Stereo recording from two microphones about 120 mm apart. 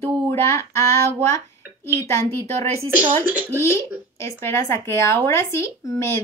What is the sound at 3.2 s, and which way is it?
Speech, 15° right (ahead or behind).